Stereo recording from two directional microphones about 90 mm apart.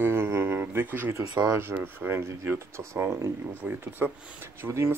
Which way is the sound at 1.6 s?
20° right (ahead or behind).